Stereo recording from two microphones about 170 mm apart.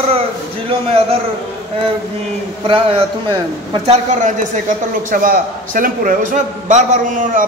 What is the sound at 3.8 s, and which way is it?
A man's voice, 45° right (ahead or behind).